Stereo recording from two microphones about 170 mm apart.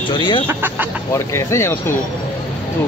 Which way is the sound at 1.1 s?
15° left (ahead or behind).